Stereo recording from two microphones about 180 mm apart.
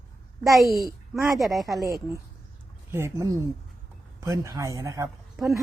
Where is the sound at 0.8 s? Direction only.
15° right (ahead or behind).